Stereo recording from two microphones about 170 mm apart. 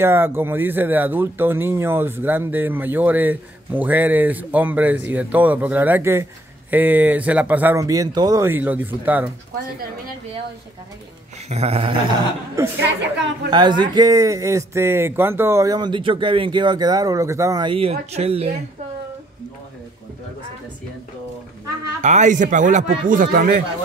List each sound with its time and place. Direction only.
0.0 s speech: 15° right (ahead or behind)
11.4 s a sound: 40° right (ahead or behind)
12.6 s speech: 15° right (ahead or behind); by 18.6 s 35° right (ahead or behind)
22.0 s speech: 45° right (ahead or behind)